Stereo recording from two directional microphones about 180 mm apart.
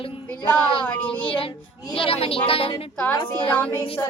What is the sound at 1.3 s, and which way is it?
A child's voice, 30° left (ahead or behind).